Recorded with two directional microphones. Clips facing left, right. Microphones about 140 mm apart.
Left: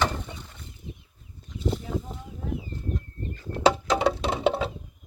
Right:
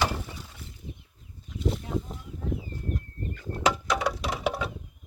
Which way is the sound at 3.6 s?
30° left (ahead or behind).